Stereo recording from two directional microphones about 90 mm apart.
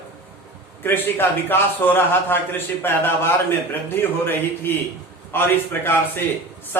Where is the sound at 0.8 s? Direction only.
25° left (ahead or behind).